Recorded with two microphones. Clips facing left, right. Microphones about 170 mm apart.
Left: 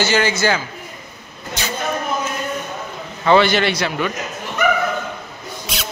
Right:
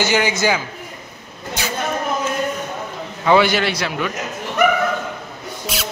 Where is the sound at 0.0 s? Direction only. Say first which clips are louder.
Even; 15° right (ahead or behind).